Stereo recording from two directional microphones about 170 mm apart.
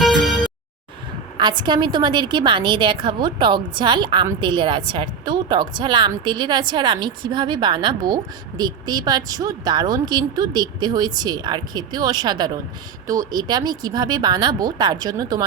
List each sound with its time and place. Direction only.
0.0 s music: centre (ahead or behind)
1.4 s a woman's voice: 25° right (ahead or behind)